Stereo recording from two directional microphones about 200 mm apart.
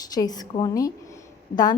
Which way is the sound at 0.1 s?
20° left (ahead or behind).